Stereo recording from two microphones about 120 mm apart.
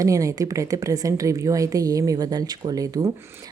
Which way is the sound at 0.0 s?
25° right (ahead or behind).